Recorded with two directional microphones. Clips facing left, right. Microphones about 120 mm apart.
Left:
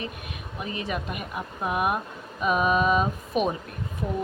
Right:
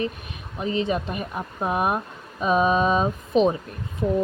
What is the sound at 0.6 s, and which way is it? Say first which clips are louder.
Speech: right 7 dB; 30° right (ahead or behind).